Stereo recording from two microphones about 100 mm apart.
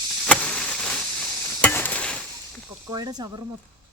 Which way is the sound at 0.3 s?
10° left (ahead or behind).